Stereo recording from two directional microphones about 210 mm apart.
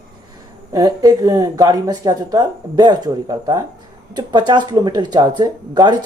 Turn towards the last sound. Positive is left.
turn(degrees=-20)  # may be behind; listen again after turning